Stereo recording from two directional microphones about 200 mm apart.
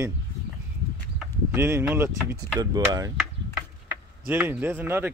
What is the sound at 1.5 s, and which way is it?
Speech, 15° right (ahead or behind).